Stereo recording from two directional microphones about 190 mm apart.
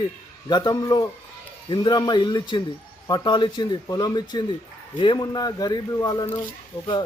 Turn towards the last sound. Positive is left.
turn(degrees=20)  # may be behind; listen again after turning